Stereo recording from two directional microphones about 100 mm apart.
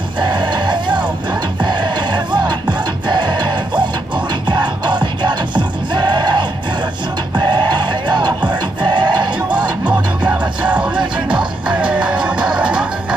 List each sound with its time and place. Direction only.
0.2 s music: 50° right (ahead or behind)
9.8 s music: 15° right (ahead or behind)